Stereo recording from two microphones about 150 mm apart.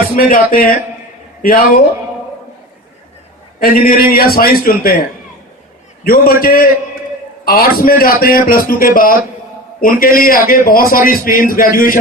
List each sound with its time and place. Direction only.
0.2 s a man's voice: 75° left (ahead or behind)
3.6 s a man's voice: 70° left (ahead or behind)
6.1 s a man's voice: 80° left